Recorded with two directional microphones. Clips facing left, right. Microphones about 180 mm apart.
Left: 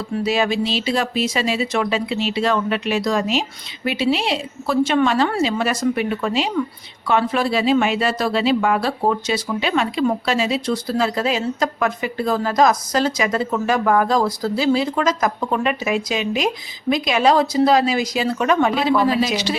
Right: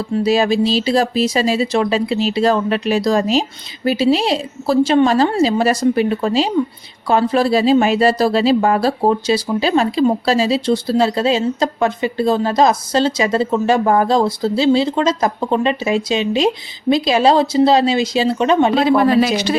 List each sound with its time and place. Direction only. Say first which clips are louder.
0.1 s speech: right 5 dB; 35° right (ahead or behind)
18.9 s speech: right 5 dB; 60° right (ahead or behind)